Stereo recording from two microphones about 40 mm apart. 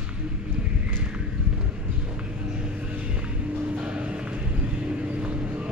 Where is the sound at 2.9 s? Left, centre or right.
Right.